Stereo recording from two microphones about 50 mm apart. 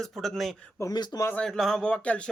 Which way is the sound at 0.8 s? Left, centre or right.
Left.